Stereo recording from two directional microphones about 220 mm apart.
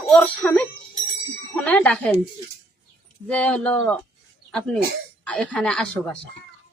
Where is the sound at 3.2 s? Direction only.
5° left (ahead or behind).